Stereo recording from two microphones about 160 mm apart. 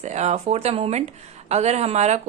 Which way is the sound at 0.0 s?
45° right (ahead or behind).